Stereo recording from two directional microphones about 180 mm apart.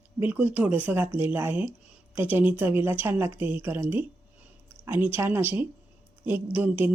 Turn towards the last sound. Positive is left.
turn(degrees=-10)  # may be behind; listen again after turning